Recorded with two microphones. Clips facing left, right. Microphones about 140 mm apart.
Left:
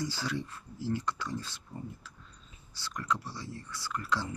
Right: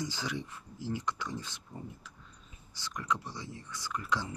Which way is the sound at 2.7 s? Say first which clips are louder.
Left 1 dB; 15° right (ahead or behind).